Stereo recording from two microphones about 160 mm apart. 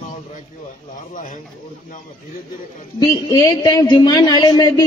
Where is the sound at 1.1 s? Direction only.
55° left (ahead or behind).